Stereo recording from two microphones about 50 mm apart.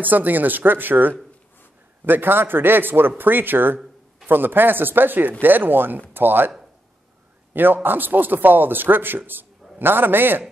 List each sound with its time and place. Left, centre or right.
0.0 s a man's voice: right
7.5 s a man's voice: right